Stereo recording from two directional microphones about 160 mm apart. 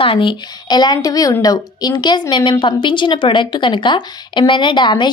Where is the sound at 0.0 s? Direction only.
30° left (ahead or behind).